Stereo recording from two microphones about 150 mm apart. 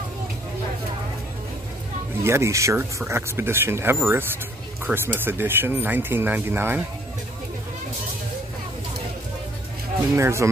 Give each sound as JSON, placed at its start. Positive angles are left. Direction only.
{"t": 2.2, "sound": "speech", "side_deg": -15}
{"t": 10.1, "sound": "speech", "side_deg": -20}